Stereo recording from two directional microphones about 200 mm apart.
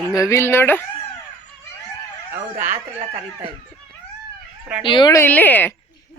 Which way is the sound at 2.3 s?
10° right (ahead or behind).